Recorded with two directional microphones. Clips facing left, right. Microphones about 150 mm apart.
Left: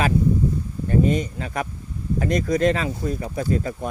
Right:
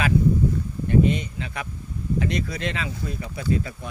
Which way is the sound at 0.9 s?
40° left (ahead or behind).